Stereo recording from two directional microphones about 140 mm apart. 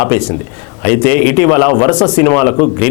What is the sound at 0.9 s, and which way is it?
A man's voice, 15° left (ahead or behind).